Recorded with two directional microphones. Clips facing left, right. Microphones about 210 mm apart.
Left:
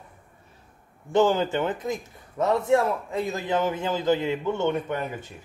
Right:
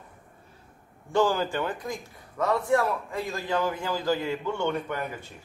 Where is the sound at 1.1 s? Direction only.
20° left (ahead or behind).